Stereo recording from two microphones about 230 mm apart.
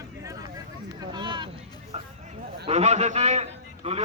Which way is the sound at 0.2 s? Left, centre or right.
Centre.